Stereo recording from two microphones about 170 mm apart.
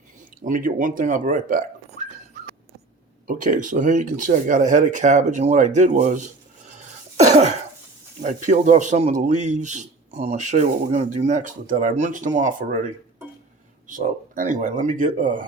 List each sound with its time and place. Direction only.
0.4 s a man's voice: 50° right (ahead or behind)
2.0 s dog: 50° right (ahead or behind)
3.2 s a man's voice: 50° right (ahead or behind)
8.2 s a man's voice: 45° right (ahead or behind)
13.8 s a man's voice: 50° right (ahead or behind)